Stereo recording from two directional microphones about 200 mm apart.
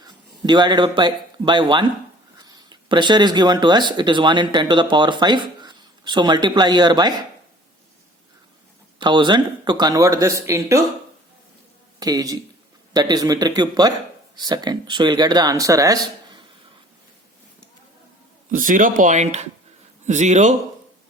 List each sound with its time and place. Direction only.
0.0 s a man's voice: 20° right (ahead or behind)
9.0 s speech: 25° right (ahead or behind)
11.9 s a man's voice: 20° right (ahead or behind)
18.5 s speech: 40° right (ahead or behind)